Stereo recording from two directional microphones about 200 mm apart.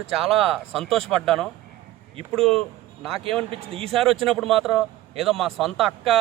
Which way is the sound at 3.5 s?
30° right (ahead or behind).